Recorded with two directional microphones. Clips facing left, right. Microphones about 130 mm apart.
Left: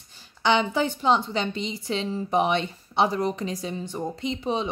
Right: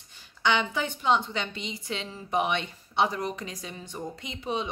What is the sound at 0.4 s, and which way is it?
A woman's voice, 30° left (ahead or behind).